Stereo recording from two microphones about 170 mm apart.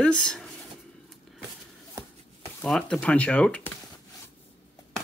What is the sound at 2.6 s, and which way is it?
Speech, 5° left (ahead or behind).